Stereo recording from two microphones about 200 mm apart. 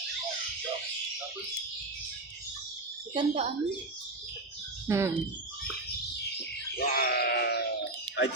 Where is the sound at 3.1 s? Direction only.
25° right (ahead or behind).